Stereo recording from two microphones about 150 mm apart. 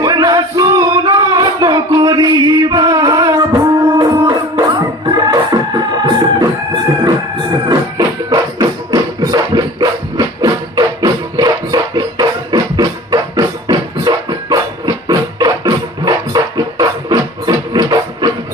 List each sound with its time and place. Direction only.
0.0 s music: 25° right (ahead or behind)
7.7 s music: 25° right (ahead or behind)